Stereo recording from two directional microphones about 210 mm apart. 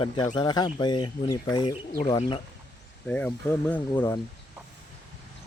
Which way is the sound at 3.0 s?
5° left (ahead or behind).